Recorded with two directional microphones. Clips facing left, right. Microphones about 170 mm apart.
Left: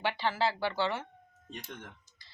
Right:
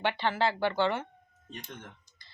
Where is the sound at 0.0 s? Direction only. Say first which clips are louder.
Right 2 dB; 5° left (ahead or behind).